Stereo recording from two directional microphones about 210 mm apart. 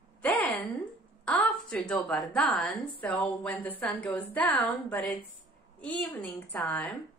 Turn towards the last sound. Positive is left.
turn(degrees=5)  # may be behind; listen again after turning